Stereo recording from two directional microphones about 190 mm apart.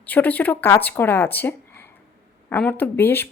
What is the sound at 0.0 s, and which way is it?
Speech, 10° left (ahead or behind).